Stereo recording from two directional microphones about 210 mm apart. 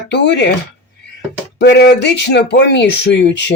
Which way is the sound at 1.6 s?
50° left (ahead or behind).